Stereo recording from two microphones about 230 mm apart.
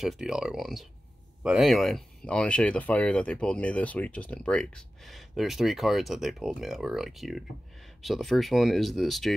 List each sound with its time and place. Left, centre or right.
0.0 s speech: centre